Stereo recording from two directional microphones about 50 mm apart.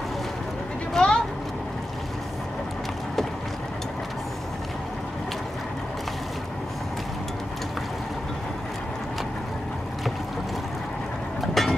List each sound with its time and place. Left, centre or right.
0.9 s vehicle: centre
11.4 s vehicle: centre